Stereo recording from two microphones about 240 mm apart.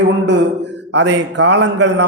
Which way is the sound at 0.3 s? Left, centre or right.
Right.